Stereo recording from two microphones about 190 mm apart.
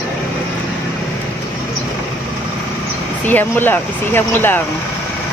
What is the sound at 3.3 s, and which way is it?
Speech, 10° left (ahead or behind).